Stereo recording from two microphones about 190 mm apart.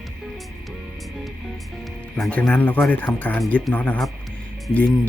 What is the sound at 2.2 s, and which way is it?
Speech, 5° left (ahead or behind).